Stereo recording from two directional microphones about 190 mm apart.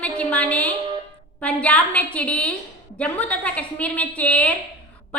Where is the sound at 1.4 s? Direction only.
5° left (ahead or behind).